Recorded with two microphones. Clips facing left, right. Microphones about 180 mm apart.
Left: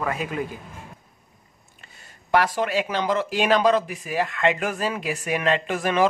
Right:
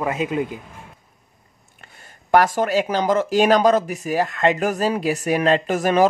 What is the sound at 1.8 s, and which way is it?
Speech, 55° right (ahead or behind).